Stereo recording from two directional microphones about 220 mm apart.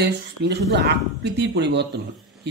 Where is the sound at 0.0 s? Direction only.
50° right (ahead or behind).